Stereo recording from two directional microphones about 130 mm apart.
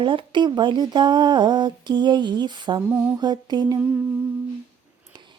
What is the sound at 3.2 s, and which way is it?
Speech, 35° right (ahead or behind).